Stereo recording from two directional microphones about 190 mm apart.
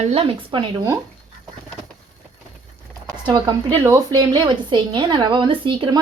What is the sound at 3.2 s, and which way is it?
A woman's voice, 20° right (ahead or behind).